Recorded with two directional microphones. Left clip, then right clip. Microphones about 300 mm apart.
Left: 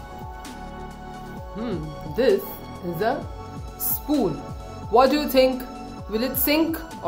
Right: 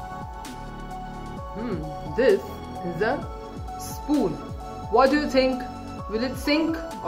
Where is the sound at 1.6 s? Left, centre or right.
Centre.